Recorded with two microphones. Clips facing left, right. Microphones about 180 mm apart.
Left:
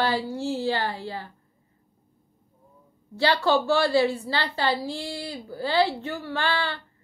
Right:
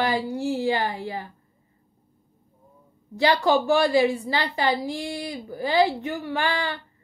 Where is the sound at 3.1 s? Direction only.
15° right (ahead or behind).